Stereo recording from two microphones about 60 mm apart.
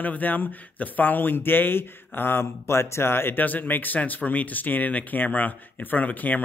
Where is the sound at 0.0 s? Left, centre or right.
Left.